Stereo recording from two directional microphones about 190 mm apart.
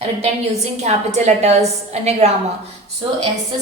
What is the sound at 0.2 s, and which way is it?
A woman's voice, 35° right (ahead or behind).